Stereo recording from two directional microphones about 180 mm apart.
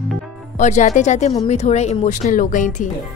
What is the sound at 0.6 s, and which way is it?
Speech, 40° left (ahead or behind).